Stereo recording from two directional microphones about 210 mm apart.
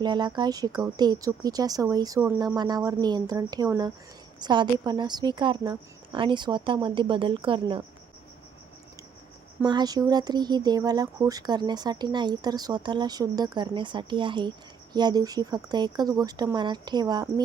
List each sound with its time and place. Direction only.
0.0 s speech: 20° right (ahead or behind)
9.6 s speech: 20° right (ahead or behind)